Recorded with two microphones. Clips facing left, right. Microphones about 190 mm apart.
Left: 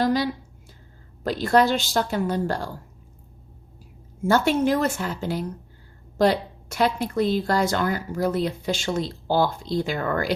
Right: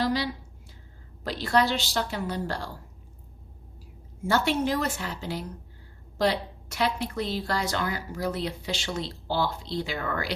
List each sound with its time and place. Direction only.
0.0 s a sound: 50° left (ahead or behind)
1.2 s a woman's voice: 50° left (ahead or behind)
4.2 s a woman's voice: 50° left (ahead or behind)